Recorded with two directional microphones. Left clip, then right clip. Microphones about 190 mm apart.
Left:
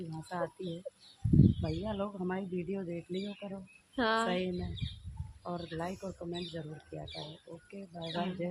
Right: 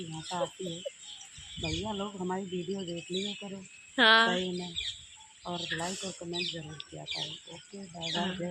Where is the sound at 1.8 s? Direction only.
25° left (ahead or behind).